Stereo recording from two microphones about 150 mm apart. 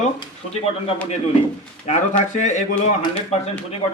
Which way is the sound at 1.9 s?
50° left (ahead or behind).